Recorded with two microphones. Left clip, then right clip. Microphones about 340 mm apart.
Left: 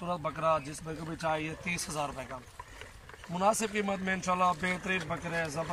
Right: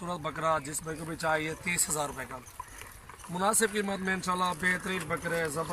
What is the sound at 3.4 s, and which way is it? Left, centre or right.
Speech, centre.